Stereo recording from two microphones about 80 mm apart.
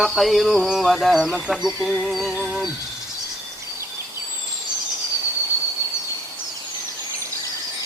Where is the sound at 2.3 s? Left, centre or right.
Centre.